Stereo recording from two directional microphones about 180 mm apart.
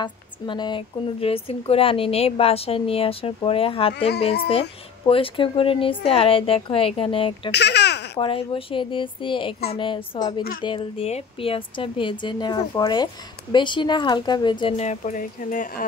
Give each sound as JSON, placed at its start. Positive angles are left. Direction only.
{"t": 0.0, "sound": "speech", "side_deg": 25}
{"t": 7.5, "sound": "baby laughter", "side_deg": 70}
{"t": 8.2, "sound": "speech", "side_deg": 30}